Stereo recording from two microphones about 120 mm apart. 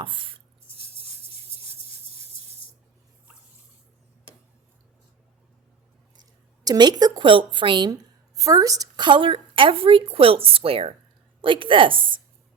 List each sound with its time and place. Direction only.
0.0 s chopping: 45° right (ahead or behind)
6.7 s a woman's voice: 35° right (ahead or behind)
7.9 s a woman's voice: 30° right (ahead or behind); by 12.2 s 45° right (ahead or behind)